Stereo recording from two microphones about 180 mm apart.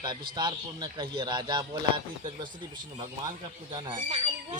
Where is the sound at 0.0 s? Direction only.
25° right (ahead or behind).